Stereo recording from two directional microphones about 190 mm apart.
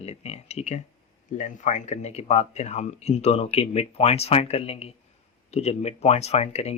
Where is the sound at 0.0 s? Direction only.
35° left (ahead or behind).